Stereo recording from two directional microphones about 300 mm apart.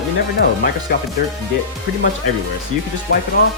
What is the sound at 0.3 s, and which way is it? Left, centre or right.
Speech, left.